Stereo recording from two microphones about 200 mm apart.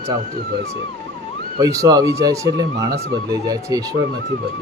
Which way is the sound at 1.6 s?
20° right (ahead or behind).